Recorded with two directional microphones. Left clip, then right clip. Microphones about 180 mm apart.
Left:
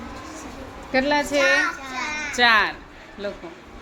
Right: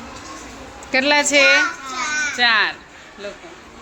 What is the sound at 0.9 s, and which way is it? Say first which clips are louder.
Speech: right 5 dB; 15° right (ahead or behind).